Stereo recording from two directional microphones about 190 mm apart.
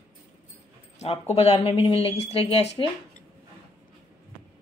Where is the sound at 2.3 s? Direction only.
30° left (ahead or behind).